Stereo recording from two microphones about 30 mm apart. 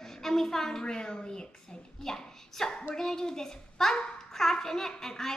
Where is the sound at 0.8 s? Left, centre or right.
Left.